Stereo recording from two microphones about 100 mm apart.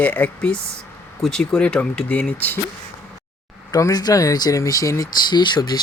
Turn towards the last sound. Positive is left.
turn(degrees=45)  # may be behind; listen again after turning